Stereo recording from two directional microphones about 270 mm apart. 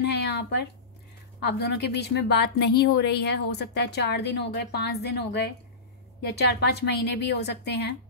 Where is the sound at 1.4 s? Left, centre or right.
Left.